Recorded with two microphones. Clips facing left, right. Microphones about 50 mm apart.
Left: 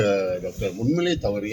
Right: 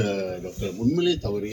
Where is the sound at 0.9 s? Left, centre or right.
Left.